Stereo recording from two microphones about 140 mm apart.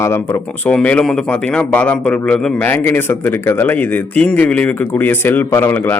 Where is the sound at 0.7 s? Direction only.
10° left (ahead or behind).